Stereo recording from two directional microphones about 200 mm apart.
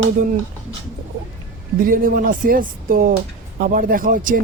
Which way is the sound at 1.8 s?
45° right (ahead or behind).